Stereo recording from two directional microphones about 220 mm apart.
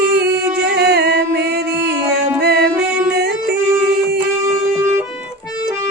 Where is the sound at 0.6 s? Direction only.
50° right (ahead or behind).